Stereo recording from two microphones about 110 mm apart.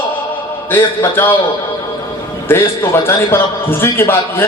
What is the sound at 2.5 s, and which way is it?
A man's voice, 20° left (ahead or behind).